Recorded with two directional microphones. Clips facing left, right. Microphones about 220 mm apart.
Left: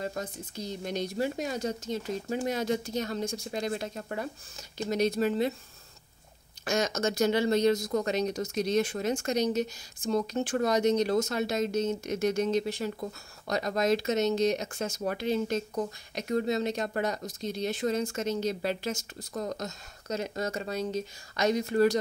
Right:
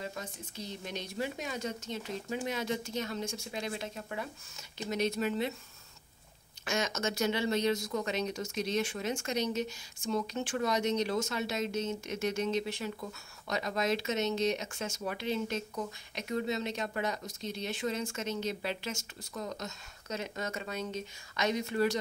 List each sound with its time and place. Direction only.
0.0 s speech: 40° left (ahead or behind)
6.6 s speech: 40° left (ahead or behind)